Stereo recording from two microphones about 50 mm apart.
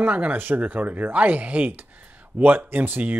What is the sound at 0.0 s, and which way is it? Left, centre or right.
Speech, right.